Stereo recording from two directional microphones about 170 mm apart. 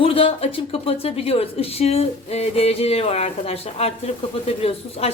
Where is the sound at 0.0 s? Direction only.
35° left (ahead or behind).